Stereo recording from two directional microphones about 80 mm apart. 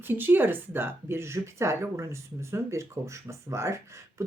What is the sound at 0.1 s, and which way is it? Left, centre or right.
Speech, right.